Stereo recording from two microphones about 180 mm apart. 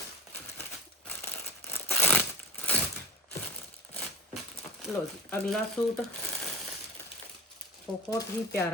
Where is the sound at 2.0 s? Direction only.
10° left (ahead or behind).